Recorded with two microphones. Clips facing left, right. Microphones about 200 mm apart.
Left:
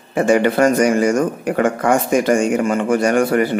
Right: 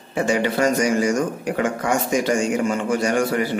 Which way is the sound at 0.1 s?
55° left (ahead or behind).